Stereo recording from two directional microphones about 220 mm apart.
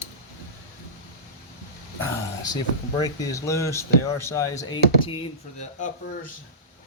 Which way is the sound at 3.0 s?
15° left (ahead or behind).